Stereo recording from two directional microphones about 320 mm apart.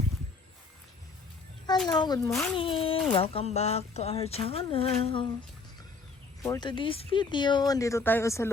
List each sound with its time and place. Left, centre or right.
1.9 s speech: centre
6.4 s speech: centre